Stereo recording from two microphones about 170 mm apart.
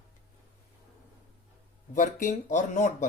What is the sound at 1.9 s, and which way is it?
Speech, 50° left (ahead or behind).